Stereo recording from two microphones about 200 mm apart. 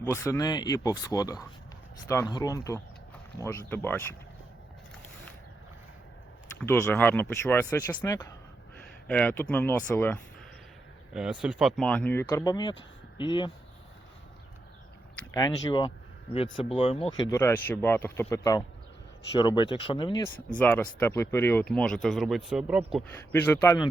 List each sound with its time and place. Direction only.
0.0 s speech: 15° left (ahead or behind)
6.6 s speech: 15° left (ahead or behind)
11.1 s speech: 5° right (ahead or behind); by 13.5 s 25° left (ahead or behind)
15.1 s speech: 20° left (ahead or behind)
20.5 s speech: 5° left (ahead or behind)
23.0 s speech: 10° left (ahead or behind)